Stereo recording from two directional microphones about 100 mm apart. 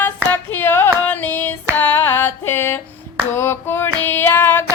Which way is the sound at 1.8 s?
20° left (ahead or behind).